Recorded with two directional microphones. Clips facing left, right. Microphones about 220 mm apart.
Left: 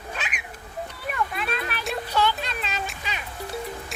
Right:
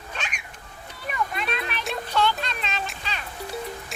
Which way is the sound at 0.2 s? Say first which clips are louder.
Left 1 dB; 5° left (ahead or behind).